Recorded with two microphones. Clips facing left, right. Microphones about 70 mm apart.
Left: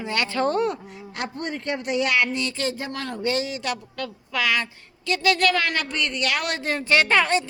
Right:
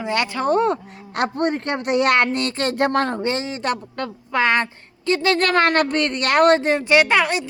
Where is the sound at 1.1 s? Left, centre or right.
Right.